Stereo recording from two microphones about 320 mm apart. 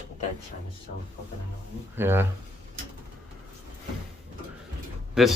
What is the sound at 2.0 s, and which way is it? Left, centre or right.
Speech, centre.